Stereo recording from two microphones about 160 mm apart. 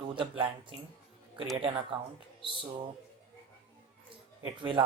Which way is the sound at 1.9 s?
30° right (ahead or behind).